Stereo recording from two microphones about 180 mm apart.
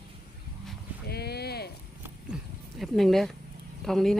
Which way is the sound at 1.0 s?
65° left (ahead or behind).